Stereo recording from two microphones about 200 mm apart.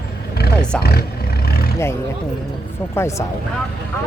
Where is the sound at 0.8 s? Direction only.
50° left (ahead or behind).